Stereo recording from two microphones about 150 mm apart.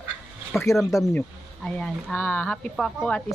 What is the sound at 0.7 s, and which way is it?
A woman's voice, centre (ahead or behind).